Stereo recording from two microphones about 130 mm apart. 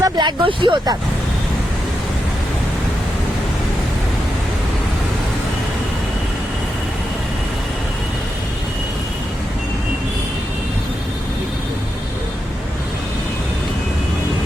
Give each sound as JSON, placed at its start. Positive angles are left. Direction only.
{"t": 0.0, "sound": "speech", "side_deg": -35}